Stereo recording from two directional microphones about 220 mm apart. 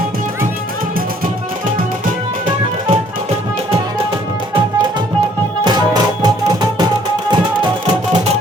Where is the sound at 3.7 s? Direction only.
25° right (ahead or behind).